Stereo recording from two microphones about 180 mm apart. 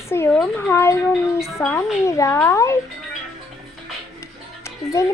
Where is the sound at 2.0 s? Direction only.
15° left (ahead or behind).